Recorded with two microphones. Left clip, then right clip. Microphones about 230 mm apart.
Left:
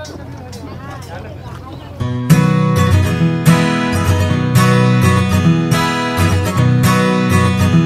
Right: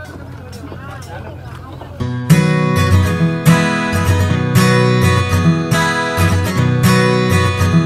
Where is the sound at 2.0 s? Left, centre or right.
Centre.